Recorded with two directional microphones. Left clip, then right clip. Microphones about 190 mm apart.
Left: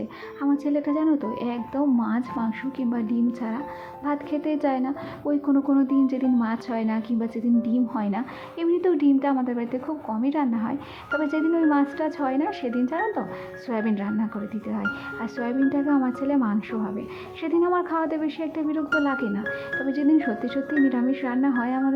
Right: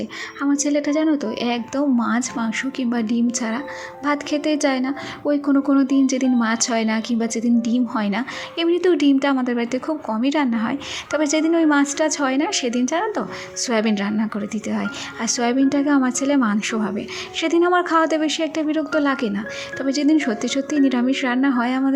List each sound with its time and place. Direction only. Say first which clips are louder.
0.6 s a woman's voice: right 7 dB; 20° right (ahead or behind)